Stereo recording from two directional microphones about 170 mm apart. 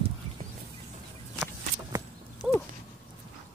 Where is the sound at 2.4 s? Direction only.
5° right (ahead or behind).